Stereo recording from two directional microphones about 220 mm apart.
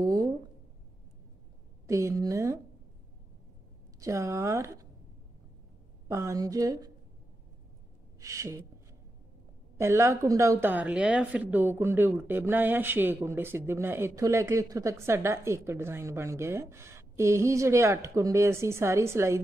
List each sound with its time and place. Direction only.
0.0 s a sound: 15° right (ahead or behind)
1.9 s speech: 15° right (ahead or behind)
4.0 s speech: 15° right (ahead or behind)
6.0 s speech: 15° right (ahead or behind)
8.2 s speech: 15° right (ahead or behind)
9.8 s speech: 10° right (ahead or behind)